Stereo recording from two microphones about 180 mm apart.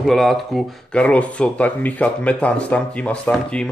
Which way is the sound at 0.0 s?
Centre (ahead or behind).